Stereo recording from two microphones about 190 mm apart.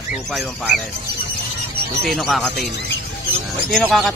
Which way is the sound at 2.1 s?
5° left (ahead or behind).